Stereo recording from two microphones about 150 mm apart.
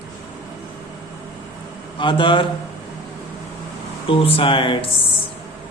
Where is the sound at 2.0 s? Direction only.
35° left (ahead or behind).